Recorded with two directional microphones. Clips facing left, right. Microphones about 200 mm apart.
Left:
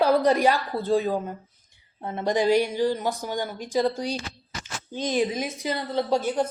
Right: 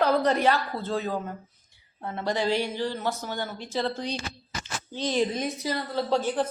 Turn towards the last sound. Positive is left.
turn(degrees=15)  # may be behind; listen again after turning